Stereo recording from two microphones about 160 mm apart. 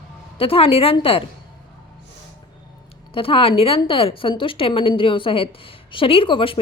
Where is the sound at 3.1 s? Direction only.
35° left (ahead or behind).